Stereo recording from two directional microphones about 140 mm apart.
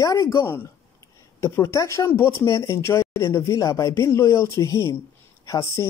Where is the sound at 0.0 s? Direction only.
20° left (ahead or behind).